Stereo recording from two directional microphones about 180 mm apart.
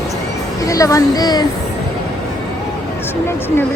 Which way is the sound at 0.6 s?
20° left (ahead or behind).